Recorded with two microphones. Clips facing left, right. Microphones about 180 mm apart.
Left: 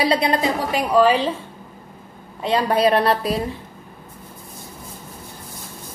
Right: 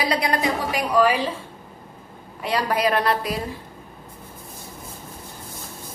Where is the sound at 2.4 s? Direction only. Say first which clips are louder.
Left 4 dB; 30° left (ahead or behind).